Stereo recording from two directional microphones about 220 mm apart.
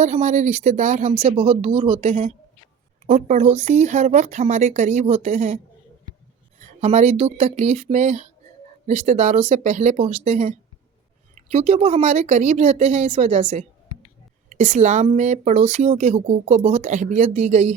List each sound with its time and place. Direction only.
0.0 s speech: 35° right (ahead or behind)
6.8 s speech: 30° right (ahead or behind)